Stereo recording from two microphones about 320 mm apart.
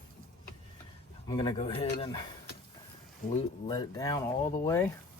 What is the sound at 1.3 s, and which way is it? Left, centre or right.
Speech, centre.